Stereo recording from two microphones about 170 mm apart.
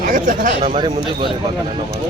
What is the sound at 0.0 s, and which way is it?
Speech, 50° right (ahead or behind).